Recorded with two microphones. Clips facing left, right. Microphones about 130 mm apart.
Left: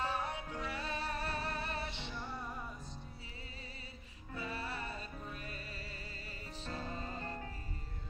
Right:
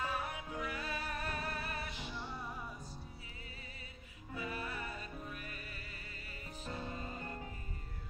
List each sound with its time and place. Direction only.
0.0 s music: 30° left (ahead or behind)
2.0 s music: 5° right (ahead or behind)
4.4 s music: 30° left (ahead or behind)
6.6 s music: 15° right (ahead or behind)
6.9 s music: 30° left (ahead or behind)